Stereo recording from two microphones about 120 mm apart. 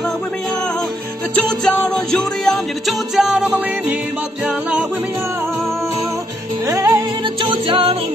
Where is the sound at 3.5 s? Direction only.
15° right (ahead or behind); by 8.1 s 50° right (ahead or behind).